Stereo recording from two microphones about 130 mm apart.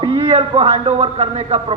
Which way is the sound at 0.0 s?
45° right (ahead or behind).